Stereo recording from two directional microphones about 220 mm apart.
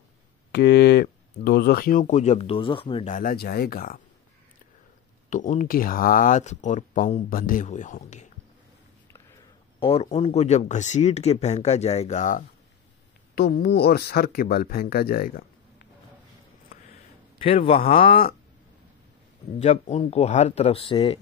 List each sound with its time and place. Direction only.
0.5 s speech: 50° left (ahead or behind); by 3.2 s 25° left (ahead or behind)
3.2 s speech: 40° left (ahead or behind)
5.3 s speech: 35° left (ahead or behind)
9.1 s a sound: 15° left (ahead or behind)
9.8 s speech: 25° left (ahead or behind); by 15.9 s 45° left (ahead or behind)
17.4 s speech: 25° left (ahead or behind)
19.6 s speech: 30° left (ahead or behind)